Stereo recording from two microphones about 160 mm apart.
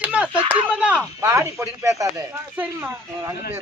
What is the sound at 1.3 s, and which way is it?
Speech, 15° right (ahead or behind).